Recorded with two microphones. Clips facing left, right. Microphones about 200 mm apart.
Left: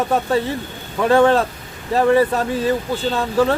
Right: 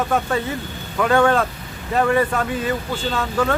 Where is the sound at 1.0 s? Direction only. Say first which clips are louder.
Left 3 dB; 30° left (ahead or behind).